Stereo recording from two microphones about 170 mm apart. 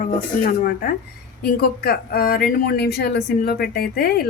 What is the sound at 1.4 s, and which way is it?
Speech, 65° left (ahead or behind).